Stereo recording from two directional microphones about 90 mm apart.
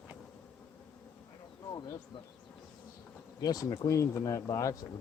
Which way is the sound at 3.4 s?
45° left (ahead or behind).